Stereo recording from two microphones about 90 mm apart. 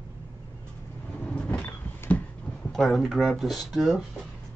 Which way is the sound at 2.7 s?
5° left (ahead or behind).